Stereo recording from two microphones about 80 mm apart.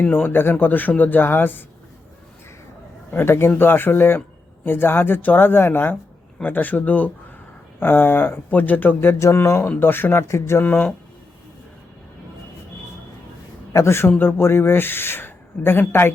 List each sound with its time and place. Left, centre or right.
0.0 s speech: left
3.1 s a man's voice: left
10.6 s speech: left
13.7 s a man's voice: left